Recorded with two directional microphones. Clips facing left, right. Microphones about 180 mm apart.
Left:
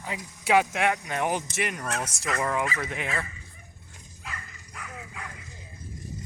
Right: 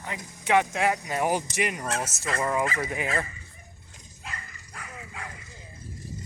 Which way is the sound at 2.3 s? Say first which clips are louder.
Even; 30° right (ahead or behind).